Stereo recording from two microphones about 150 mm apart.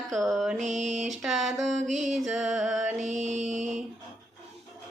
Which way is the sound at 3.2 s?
55° right (ahead or behind).